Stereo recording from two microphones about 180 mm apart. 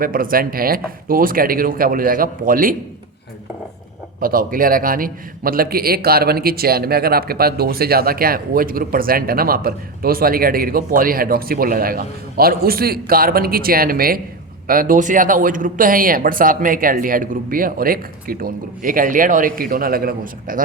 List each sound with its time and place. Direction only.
0.0 s speech: 50° right (ahead or behind)
4.2 s a man's voice: 50° right (ahead or behind)